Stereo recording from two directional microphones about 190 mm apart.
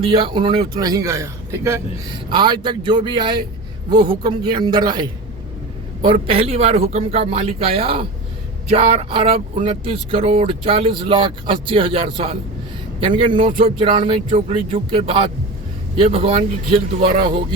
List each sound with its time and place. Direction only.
0.0 s speech: 25° right (ahead or behind)